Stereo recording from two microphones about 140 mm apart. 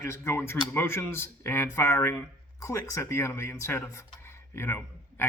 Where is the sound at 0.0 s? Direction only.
20° left (ahead or behind).